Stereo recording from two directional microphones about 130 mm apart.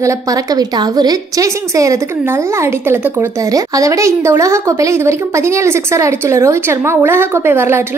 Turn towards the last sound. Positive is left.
turn(degrees=-20)  # may be behind; listen again after turning